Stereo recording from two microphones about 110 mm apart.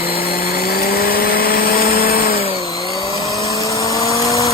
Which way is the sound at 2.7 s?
35° left (ahead or behind).